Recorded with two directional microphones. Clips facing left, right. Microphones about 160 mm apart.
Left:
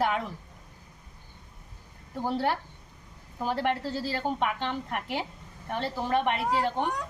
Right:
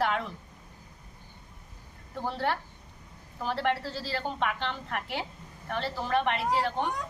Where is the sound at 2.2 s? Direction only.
10° left (ahead or behind).